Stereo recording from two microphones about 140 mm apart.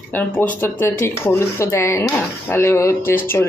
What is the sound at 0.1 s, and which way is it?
Speech, 15° left (ahead or behind).